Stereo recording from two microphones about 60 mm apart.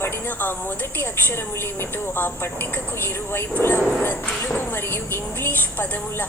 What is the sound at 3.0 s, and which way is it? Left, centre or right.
Speech, left.